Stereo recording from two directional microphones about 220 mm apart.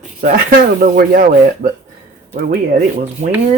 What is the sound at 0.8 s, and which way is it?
Speech, 40° right (ahead or behind).